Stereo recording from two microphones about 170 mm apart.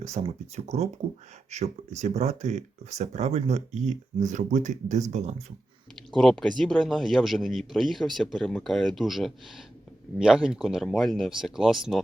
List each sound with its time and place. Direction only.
0.0 s speech: 40° right (ahead or behind)
6.1 s speech: centre (ahead or behind)